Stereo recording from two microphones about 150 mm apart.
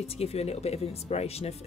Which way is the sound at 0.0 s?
45° left (ahead or behind).